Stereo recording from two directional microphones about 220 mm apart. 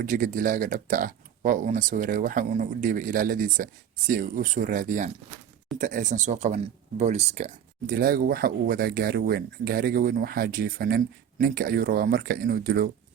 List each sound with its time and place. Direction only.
0.0 s speech: 35° right (ahead or behind)